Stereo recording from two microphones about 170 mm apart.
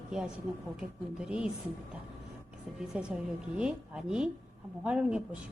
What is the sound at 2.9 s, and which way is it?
A woman's voice, 5° right (ahead or behind).